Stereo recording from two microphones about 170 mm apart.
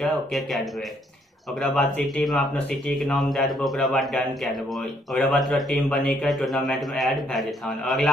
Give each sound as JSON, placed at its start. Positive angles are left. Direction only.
{"t": 0.0, "sound": "a man's voice", "side_deg": 0}